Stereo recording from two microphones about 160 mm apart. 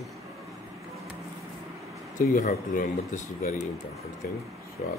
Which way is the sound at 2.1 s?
50° left (ahead or behind).